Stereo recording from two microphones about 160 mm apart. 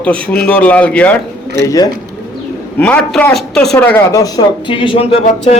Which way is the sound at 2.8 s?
5° left (ahead or behind).